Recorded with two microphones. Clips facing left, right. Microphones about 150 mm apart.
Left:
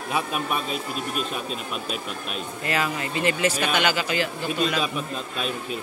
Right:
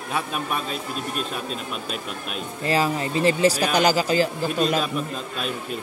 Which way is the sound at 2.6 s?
30° right (ahead or behind).